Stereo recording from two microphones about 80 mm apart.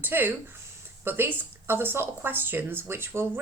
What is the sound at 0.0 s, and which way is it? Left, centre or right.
Speech, right.